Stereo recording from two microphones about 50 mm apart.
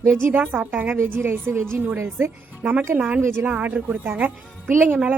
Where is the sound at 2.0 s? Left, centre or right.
Right.